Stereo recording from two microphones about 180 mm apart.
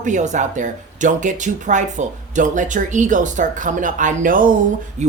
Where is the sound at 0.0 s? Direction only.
40° right (ahead or behind).